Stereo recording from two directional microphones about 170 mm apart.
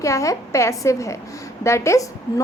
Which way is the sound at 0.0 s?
20° left (ahead or behind).